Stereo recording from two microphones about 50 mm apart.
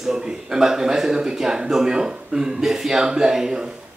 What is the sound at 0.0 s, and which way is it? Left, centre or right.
Speech, centre.